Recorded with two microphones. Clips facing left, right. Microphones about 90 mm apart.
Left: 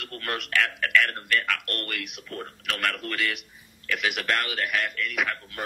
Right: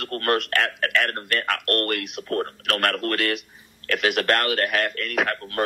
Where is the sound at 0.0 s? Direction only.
55° right (ahead or behind).